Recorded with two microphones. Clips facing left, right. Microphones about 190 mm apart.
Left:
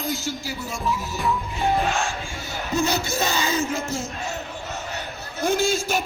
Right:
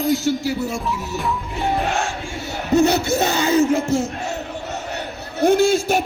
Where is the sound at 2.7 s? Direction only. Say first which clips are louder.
Right 8 dB; 65° right (ahead or behind).